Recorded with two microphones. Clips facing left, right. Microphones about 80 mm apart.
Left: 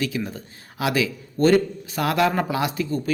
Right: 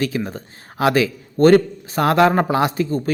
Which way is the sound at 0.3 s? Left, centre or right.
Right.